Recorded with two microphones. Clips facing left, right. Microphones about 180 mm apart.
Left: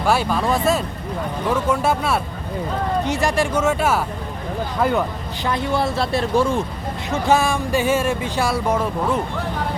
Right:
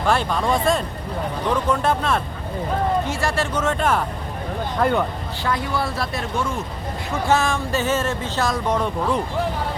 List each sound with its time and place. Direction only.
0.0 s speech: 5° left (ahead or behind)
5.5 s speech: 25° left (ahead or behind)
7.3 s speech: 10° left (ahead or behind)